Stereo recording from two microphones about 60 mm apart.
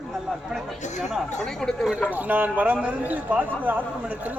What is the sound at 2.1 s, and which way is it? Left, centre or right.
Speech, right.